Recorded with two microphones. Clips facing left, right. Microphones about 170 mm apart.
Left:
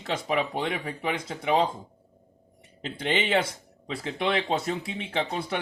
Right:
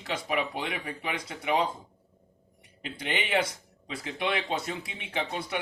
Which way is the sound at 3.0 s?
25° left (ahead or behind).